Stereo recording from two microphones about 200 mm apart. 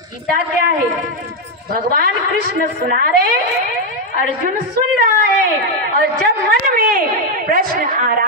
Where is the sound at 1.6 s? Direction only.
45° right (ahead or behind).